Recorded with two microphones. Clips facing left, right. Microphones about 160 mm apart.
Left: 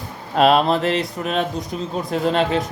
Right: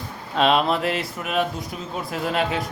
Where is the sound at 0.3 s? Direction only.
40° left (ahead or behind).